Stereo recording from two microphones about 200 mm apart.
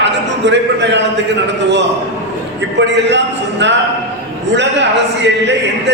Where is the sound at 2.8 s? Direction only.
60° right (ahead or behind).